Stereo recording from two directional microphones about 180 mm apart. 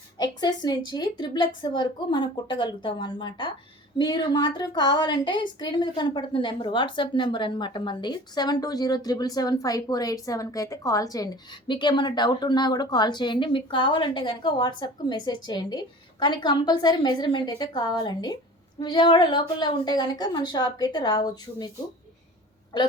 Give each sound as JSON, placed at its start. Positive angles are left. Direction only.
{"t": 0.2, "sound": "a woman's voice", "side_deg": 25}
{"t": 22.7, "sound": "a woman's voice", "side_deg": 25}